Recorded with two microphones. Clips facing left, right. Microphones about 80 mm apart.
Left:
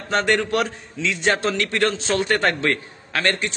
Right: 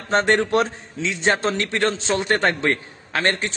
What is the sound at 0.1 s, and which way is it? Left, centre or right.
A man's voice, right.